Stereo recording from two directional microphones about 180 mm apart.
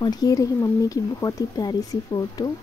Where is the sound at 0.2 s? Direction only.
20° left (ahead or behind).